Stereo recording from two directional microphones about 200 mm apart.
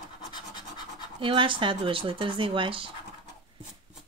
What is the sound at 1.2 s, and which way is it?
Speech, 25° right (ahead or behind).